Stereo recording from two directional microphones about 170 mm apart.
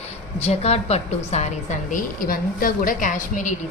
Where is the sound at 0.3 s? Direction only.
40° left (ahead or behind).